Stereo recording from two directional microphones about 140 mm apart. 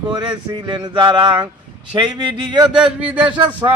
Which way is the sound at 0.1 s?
35° right (ahead or behind).